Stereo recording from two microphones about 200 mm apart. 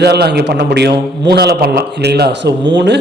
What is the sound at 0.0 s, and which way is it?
A man's voice, 55° right (ahead or behind).